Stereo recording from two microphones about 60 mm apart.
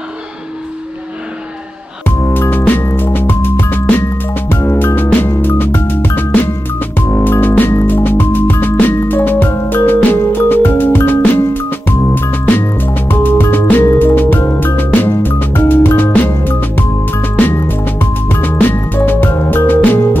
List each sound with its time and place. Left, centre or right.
2.0 s music: left